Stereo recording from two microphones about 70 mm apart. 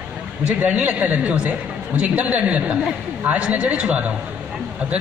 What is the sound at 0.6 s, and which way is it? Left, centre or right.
Speech, right.